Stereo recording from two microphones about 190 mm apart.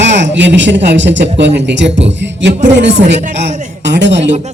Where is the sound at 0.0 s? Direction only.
70° right (ahead or behind).